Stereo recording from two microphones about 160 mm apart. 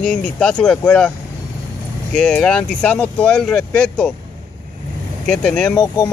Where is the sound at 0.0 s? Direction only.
5° left (ahead or behind).